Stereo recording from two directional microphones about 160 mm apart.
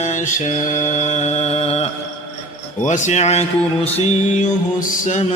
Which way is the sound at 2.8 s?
50° left (ahead or behind).